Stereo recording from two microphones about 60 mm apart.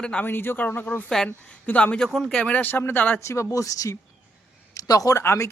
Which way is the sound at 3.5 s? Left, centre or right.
Left.